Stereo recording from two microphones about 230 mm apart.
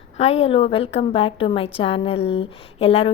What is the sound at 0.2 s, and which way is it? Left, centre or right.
A woman's voice, left.